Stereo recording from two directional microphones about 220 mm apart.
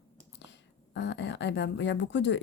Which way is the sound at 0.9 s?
55° left (ahead or behind).